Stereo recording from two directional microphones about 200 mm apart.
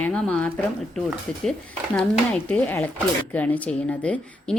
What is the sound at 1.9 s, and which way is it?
Speech, 5° left (ahead or behind).